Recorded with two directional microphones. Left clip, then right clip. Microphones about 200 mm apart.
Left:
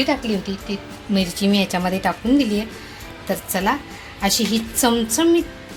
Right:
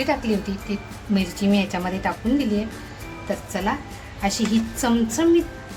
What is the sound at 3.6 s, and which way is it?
A woman's voice, 35° left (ahead or behind).